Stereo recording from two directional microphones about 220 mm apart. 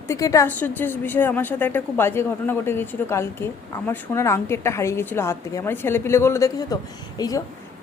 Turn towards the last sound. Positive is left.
turn(degrees=15)  # may be behind; listen again after turning